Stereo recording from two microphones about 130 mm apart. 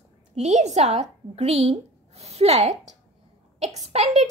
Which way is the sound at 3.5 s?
55° right (ahead or behind).